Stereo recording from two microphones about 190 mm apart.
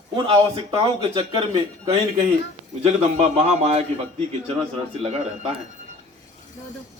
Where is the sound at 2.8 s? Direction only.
35° right (ahead or behind).